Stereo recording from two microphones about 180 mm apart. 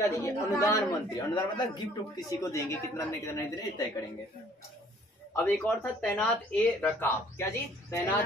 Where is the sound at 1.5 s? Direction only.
25° left (ahead or behind).